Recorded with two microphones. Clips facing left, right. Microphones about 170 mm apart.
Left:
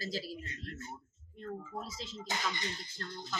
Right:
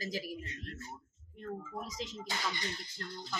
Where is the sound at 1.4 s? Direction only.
15° right (ahead or behind).